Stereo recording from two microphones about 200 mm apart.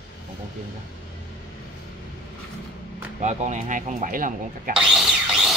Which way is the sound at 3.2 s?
35° right (ahead or behind).